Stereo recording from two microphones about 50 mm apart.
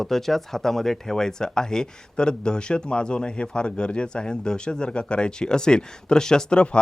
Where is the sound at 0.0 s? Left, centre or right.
Centre.